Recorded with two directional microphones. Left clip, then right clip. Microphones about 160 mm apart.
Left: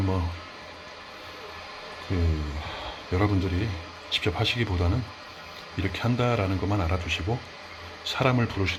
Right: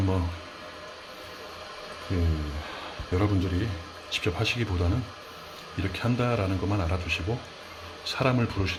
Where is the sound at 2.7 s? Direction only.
Centre (ahead or behind).